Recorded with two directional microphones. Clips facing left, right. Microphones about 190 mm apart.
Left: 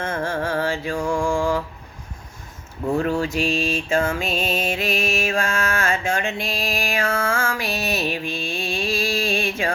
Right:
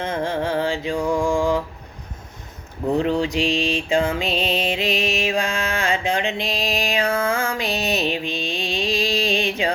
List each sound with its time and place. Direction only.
0.0 s mantra: 15° right (ahead or behind)
2.8 s mantra: 20° right (ahead or behind)